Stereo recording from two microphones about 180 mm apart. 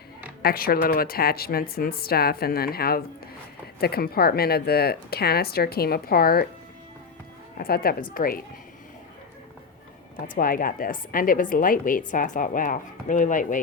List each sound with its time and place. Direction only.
0.4 s speech: 55° left (ahead or behind)
7.6 s a woman's voice: 55° left (ahead or behind)
10.3 s a woman's voice: 50° left (ahead or behind)